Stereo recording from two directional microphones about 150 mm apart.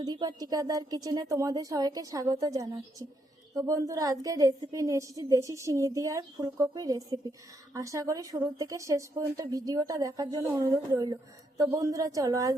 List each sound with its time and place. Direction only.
0.0 s speech: 30° right (ahead or behind)